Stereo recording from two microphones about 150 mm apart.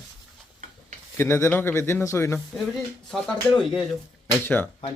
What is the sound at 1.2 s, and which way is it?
Speech, 15° left (ahead or behind).